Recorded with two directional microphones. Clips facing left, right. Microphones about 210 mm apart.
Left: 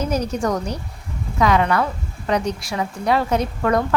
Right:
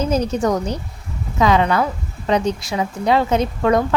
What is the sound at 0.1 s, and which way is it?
A woman's voice, 20° right (ahead or behind).